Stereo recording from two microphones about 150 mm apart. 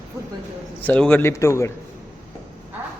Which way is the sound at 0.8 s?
10° left (ahead or behind).